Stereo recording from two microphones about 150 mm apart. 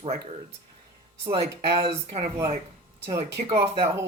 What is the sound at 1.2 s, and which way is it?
Speech, 40° right (ahead or behind).